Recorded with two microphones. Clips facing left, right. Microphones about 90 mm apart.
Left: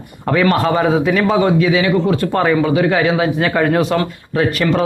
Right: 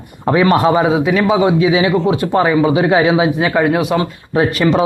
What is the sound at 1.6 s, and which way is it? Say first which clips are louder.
Speech: right 1 dB; 25° right (ahead or behind).